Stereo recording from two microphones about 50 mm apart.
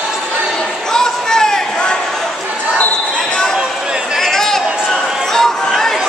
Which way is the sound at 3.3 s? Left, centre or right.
Centre.